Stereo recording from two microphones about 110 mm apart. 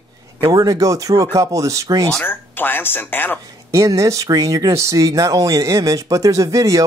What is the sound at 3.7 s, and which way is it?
Speech, 30° right (ahead or behind).